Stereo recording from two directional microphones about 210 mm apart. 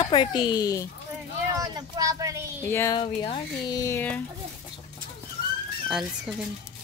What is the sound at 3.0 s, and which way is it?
Speech, 30° left (ahead or behind).